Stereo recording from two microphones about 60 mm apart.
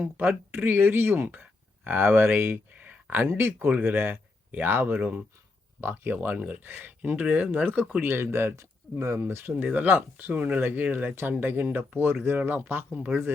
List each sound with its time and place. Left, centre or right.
0.0 s speech: right
2.7 s a sound: right
3.2 s speech: right
3.7 s speech: right
4.9 s speech: right
5.8 s speech: right
7.0 s speech: right
9.1 s speech: right